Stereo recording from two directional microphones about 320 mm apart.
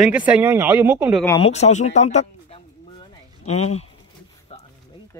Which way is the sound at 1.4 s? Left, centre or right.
Centre.